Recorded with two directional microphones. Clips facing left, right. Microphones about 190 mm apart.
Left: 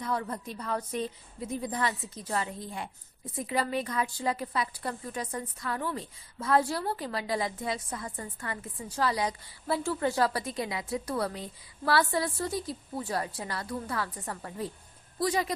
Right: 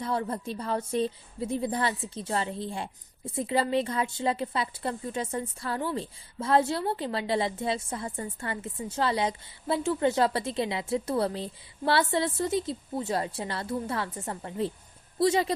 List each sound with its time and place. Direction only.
0.0 s a woman's voice: 30° right (ahead or behind)